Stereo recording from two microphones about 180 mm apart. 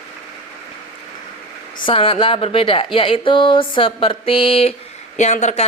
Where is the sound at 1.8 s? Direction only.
30° left (ahead or behind).